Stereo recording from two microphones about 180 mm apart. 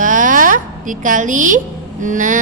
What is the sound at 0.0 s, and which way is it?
A woman's voice, 45° right (ahead or behind).